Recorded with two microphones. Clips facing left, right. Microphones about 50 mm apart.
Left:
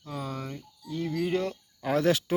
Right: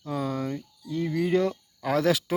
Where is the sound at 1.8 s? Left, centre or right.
Right.